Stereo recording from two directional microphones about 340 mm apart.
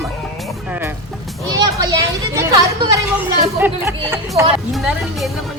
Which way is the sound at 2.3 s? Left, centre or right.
Centre.